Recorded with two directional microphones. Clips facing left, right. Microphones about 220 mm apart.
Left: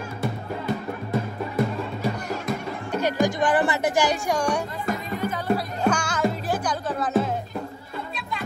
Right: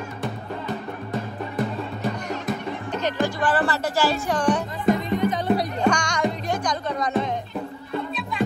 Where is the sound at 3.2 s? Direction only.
15° left (ahead or behind).